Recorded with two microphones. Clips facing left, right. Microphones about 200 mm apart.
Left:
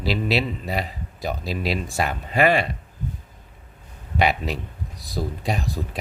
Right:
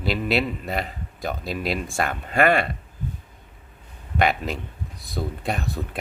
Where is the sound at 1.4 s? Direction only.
50° right (ahead or behind).